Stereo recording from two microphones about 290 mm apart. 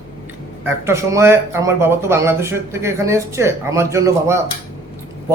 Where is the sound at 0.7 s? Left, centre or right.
Centre.